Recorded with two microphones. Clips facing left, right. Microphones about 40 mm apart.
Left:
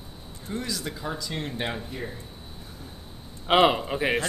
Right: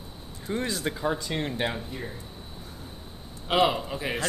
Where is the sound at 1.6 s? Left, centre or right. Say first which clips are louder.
Right 1 dB; centre.